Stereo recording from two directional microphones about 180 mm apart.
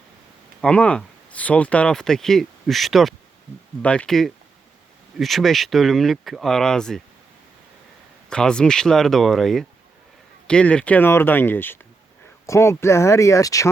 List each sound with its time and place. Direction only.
0.6 s speech: 5° left (ahead or behind)
8.3 s speech: 5° left (ahead or behind)